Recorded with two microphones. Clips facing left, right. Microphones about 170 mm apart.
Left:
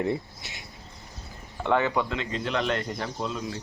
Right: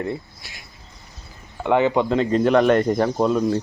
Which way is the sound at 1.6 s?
20° right (ahead or behind).